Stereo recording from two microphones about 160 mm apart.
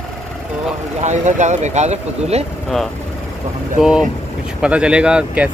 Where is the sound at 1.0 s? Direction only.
50° right (ahead or behind).